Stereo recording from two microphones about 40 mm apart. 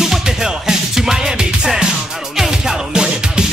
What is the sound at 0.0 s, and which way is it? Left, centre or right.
Music, centre.